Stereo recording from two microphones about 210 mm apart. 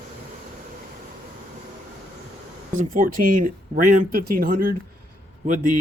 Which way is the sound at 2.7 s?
40° right (ahead or behind).